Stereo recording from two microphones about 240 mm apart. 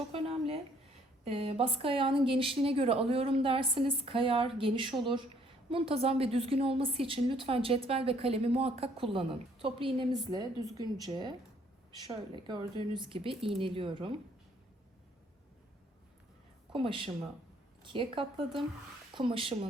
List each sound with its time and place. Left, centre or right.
0.1 s a sound: right
1.2 s a woman's voice: right
16.7 s a woman's voice: right